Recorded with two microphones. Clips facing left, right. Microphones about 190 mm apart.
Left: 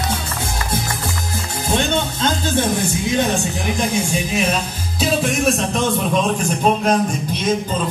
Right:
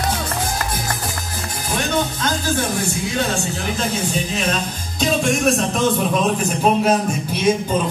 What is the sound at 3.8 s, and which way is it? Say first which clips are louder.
Speech: left 2 dB; 15° left (ahead or behind).